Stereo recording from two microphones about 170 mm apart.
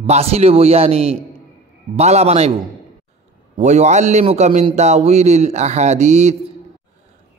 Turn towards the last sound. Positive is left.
turn(degrees=-40)  # may be behind; listen again after turning